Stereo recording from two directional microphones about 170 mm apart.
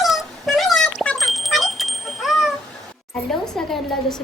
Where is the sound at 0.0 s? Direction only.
Centre (ahead or behind).